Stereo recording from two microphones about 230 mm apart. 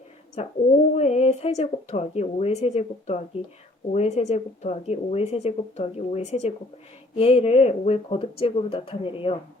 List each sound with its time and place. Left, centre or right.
0.4 s speech: left